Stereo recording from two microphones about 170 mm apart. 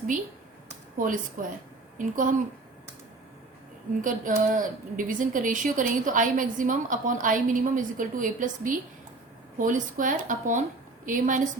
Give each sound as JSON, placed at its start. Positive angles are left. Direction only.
{"t": 0.9, "sound": "speech", "side_deg": -50}
{"t": 4.0, "sound": "a woman's voice", "side_deg": -50}